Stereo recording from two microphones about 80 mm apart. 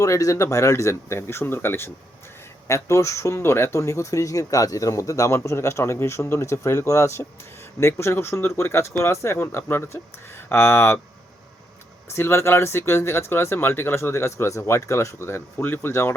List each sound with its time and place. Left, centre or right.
0.0 s speech: left
12.1 s speech: left